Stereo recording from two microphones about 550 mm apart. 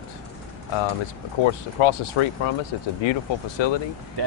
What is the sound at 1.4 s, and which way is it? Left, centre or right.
Speech, left.